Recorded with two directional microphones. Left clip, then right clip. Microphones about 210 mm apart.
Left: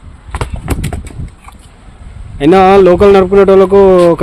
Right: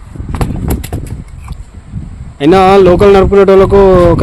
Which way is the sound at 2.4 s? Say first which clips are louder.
Even; centre (ahead or behind).